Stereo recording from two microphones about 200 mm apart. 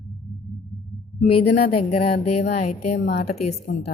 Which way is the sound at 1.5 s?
50° left (ahead or behind).